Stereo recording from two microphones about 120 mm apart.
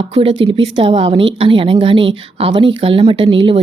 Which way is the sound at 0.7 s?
55° right (ahead or behind).